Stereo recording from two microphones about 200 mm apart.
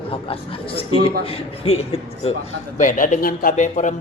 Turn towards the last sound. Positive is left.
turn(degrees=40)  # may be behind; listen again after turning